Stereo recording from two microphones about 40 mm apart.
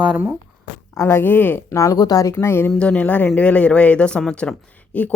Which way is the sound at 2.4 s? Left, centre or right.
Left.